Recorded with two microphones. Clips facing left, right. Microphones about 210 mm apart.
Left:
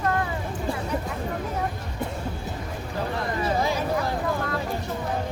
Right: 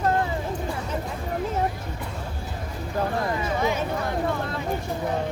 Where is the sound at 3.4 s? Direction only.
35° left (ahead or behind).